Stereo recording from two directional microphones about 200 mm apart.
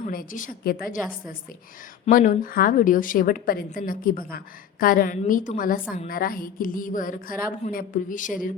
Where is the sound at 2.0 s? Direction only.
40° left (ahead or behind).